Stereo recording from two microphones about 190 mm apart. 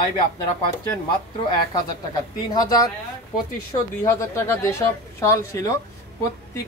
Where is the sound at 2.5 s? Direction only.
20° left (ahead or behind).